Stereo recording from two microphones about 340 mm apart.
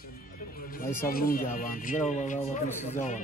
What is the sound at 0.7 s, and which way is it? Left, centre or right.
Speech, left.